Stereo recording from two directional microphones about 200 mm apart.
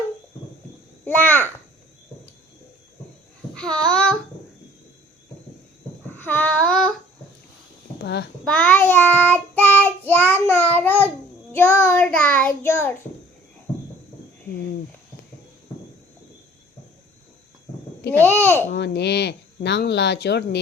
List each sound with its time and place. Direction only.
1.0 s child singing: 10° left (ahead or behind)
3.5 s babbling: 5° left (ahead or behind)
6.1 s a sound: 10° left (ahead or behind)
8.0 s a child's voice: 55° left (ahead or behind)
8.4 s child singing: 5° left (ahead or behind)
18.4 s child singing: 10° left (ahead or behind)
18.7 s speech: 60° left (ahead or behind)